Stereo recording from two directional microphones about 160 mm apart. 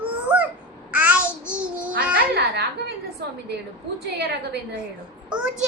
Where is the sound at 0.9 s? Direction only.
10° right (ahead or behind).